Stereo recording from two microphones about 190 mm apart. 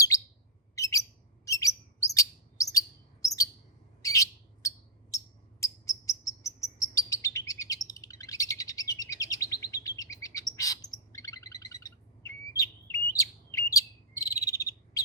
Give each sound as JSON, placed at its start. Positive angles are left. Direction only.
{"t": 0.8, "sound": "bird", "side_deg": 15}
{"t": 1.5, "sound": "chirp", "side_deg": 15}
{"t": 4.0, "sound": "bird", "side_deg": 15}